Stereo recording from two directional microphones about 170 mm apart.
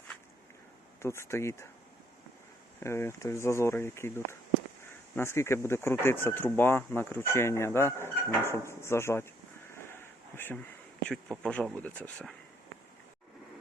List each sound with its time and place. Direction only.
1.0 s speech: 15° left (ahead or behind)
2.8 s speech: 15° left (ahead or behind)
10.3 s speech: 10° left (ahead or behind)